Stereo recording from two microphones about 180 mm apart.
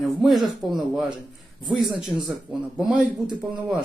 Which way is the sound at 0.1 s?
Centre (ahead or behind).